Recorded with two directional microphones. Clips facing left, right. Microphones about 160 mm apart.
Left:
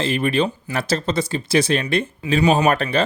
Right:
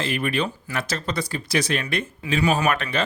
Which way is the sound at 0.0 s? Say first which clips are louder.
Left 5 dB; 25° left (ahead or behind).